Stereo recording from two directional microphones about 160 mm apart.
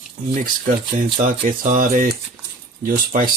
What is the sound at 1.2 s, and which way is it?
Speech, 55° right (ahead or behind).